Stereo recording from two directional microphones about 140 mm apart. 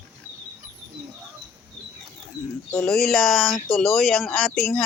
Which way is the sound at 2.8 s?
Centre (ahead or behind).